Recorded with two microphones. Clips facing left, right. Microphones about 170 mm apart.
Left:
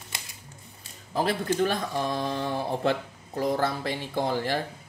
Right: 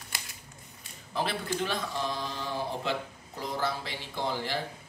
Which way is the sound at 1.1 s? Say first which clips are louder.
Left 6 dB; 45° left (ahead or behind).